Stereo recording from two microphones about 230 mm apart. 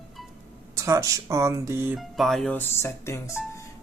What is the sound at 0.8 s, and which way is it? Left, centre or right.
Speech, centre.